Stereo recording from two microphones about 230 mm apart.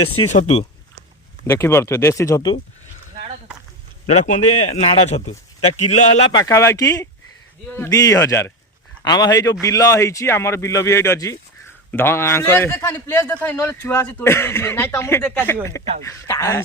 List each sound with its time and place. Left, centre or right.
0.0 s speech: left
0.3 s speech: left
1.5 s a man's voice: centre
4.0 s speech: left
4.4 s speech: left
4.7 s speech: left
6.4 s a man's voice: centre